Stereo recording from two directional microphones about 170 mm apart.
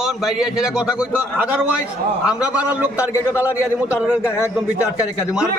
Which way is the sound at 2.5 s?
5° right (ahead or behind).